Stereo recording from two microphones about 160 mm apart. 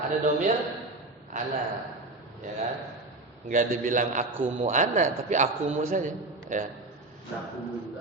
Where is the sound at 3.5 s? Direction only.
55° right (ahead or behind).